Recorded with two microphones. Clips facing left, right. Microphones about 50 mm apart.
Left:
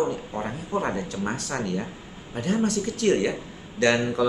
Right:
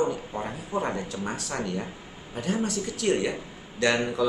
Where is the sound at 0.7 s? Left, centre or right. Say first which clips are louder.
Left 2 dB; left.